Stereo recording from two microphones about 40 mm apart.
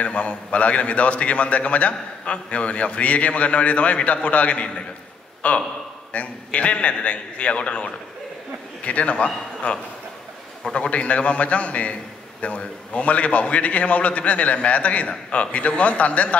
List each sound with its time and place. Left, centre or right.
0.0 s a man's voice: left
10.9 s a man's voice: left